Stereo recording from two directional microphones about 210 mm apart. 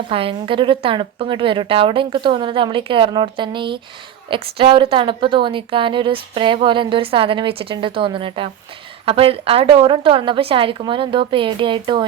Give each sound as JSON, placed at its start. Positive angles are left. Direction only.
{"t": 0.1, "sound": "a woman's voice", "side_deg": -25}